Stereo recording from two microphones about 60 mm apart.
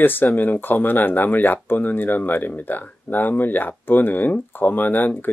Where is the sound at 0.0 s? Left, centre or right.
Left.